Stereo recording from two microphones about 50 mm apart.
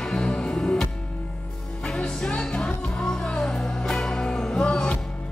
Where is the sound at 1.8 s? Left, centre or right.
Centre.